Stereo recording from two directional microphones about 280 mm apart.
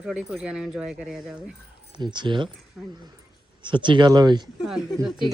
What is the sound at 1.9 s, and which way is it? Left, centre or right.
Speech, centre.